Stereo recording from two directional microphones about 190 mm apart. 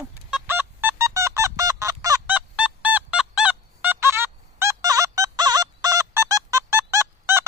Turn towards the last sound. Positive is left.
turn(degrees=-15)  # may be behind; listen again after turning